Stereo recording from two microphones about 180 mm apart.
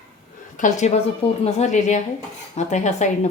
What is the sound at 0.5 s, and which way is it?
A woman's voice, 45° left (ahead or behind).